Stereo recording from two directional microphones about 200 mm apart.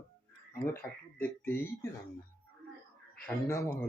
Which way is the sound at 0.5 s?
10° left (ahead or behind).